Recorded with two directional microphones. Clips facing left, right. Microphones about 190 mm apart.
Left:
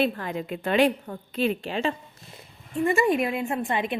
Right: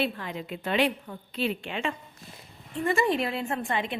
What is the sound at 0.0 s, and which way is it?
A woman's voice, 45° left (ahead or behind).